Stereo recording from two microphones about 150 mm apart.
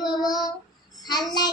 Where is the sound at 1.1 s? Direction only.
25° left (ahead or behind).